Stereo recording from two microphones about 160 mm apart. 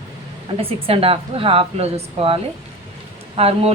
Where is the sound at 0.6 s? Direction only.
35° right (ahead or behind).